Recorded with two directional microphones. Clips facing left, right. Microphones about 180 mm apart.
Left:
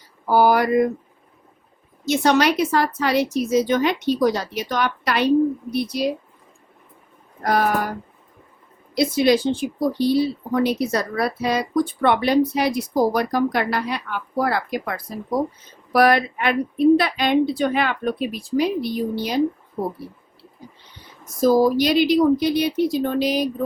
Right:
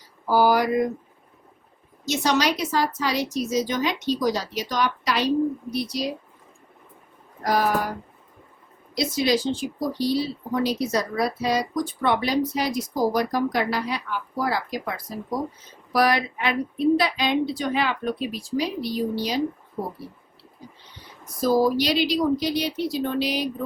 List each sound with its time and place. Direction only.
0.3 s speech: 60° left (ahead or behind)
2.0 s speech: 55° left (ahead or behind)
7.4 s speech: 55° left (ahead or behind)
9.0 s speech: 55° left (ahead or behind)
21.4 s speech: 45° left (ahead or behind)